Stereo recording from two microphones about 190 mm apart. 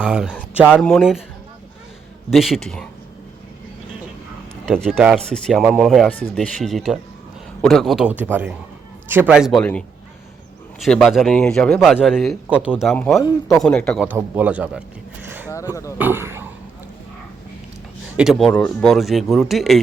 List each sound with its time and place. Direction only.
0.0 s a man's voice: 5° right (ahead or behind)
2.3 s a man's voice: centre (ahead or behind)
4.6 s a man's voice: centre (ahead or behind)
10.8 s a man's voice: centre (ahead or behind)
14.2 s a man's voice: 10° right (ahead or behind)
15.2 s a sound: 10° right (ahead or behind)
15.7 s speech: 15° left (ahead or behind)
16.0 s speech: 10° right (ahead or behind)
18.2 s a man's voice: centre (ahead or behind)